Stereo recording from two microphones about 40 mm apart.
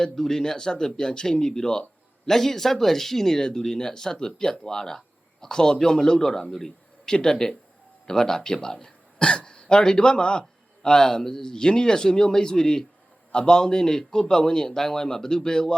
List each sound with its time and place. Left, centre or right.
0.0 s a man's voice: centre